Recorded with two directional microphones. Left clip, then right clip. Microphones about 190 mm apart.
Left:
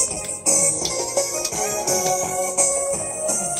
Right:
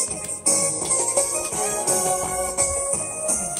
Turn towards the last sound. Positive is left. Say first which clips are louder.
# left 3 dB
turn(degrees=50)  # may be behind; listen again after turning